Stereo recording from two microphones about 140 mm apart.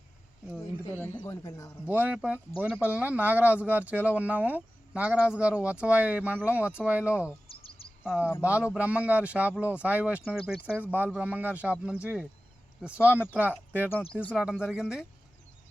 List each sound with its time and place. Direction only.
1.0 s speech: 15° left (ahead or behind)
1.9 s speech: 10° right (ahead or behind)
7.5 s a sound: 40° left (ahead or behind)
8.0 s speech: 5° right (ahead or behind)
10.3 s speech: 5° left (ahead or behind)
10.8 s speech: 15° right (ahead or behind)
14.1 s speech: 10° left (ahead or behind)
14.3 s speech: 5° right (ahead or behind)